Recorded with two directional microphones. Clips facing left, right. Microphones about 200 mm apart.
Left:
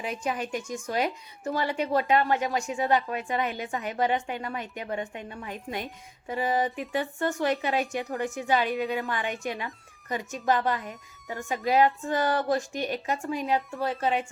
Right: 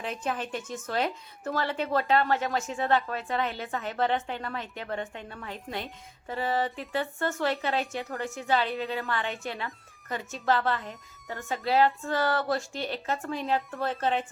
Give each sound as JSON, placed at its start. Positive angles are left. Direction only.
{"t": 0.0, "sound": "a woman's voice", "side_deg": 10}